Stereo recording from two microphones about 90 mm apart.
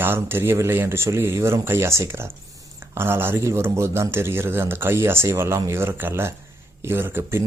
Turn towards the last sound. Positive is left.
turn(degrees=-30)  # may be behind; listen again after turning